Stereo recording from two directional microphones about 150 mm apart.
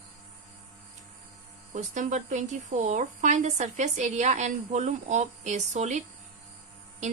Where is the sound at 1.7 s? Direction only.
55° right (ahead or behind).